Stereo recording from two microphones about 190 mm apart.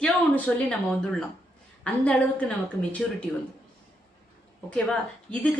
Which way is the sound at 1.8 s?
5° left (ahead or behind).